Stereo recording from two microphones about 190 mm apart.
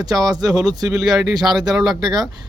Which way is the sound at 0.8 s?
Centre (ahead or behind).